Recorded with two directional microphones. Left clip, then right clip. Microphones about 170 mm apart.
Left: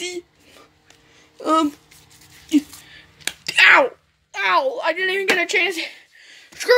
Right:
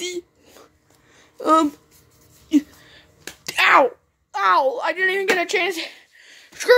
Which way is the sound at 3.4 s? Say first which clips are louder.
Left 2 dB; 10° right (ahead or behind).